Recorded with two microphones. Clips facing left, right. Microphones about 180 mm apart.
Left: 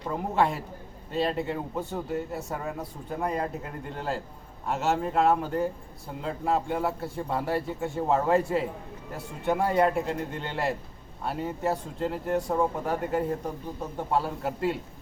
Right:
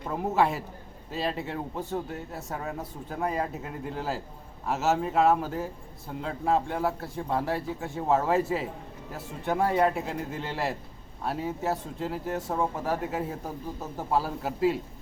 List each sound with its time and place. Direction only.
0.1 s a man's voice: centre (ahead or behind)